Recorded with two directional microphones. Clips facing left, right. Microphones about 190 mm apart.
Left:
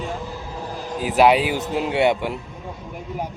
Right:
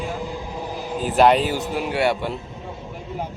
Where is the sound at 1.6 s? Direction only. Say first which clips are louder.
Left 2 dB; 20° left (ahead or behind).